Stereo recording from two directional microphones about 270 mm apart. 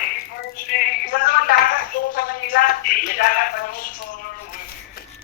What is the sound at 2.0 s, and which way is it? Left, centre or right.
Speech, left.